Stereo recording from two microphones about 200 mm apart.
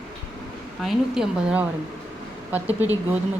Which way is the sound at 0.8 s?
Centre (ahead or behind).